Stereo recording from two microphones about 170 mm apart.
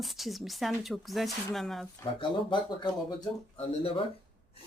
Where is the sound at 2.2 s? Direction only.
30° left (ahead or behind).